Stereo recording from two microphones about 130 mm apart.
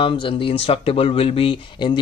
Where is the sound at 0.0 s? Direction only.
45° left (ahead or behind).